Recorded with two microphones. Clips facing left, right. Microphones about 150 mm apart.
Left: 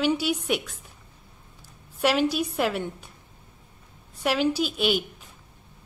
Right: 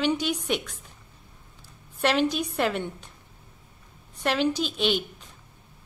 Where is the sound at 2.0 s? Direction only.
10° left (ahead or behind).